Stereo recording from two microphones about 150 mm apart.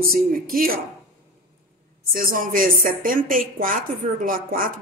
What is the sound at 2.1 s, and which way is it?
A woman's voice, 70° right (ahead or behind).